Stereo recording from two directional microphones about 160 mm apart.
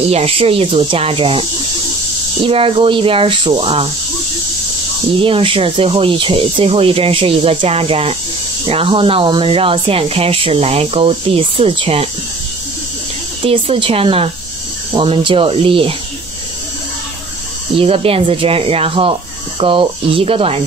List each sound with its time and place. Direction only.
0.1 s speech: 40° right (ahead or behind)
2.4 s speech: 35° right (ahead or behind)
5.2 s speech: 35° right (ahead or behind)
13.4 s speech: 35° right (ahead or behind)
17.7 s speech: 35° right (ahead or behind)